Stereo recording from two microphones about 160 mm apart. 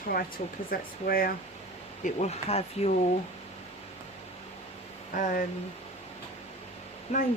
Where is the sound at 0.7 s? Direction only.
65° left (ahead or behind).